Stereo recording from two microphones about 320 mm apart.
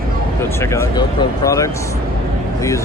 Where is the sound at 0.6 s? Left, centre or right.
Centre.